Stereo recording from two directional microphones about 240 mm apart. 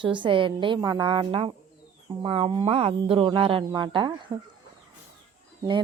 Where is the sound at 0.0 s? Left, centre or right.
Centre.